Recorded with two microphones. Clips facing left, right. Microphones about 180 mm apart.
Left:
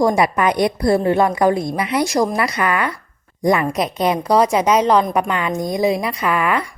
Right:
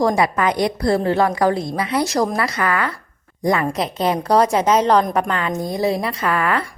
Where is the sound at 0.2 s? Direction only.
20° left (ahead or behind).